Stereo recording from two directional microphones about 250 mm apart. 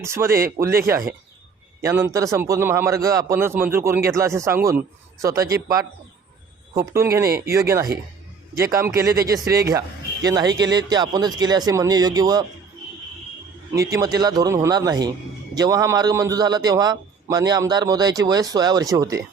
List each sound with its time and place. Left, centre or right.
0.0 s a man's voice: centre
1.8 s a man's voice: centre
7.3 s speech: right
8.7 s a man's voice: centre
13.7 s a man's voice: centre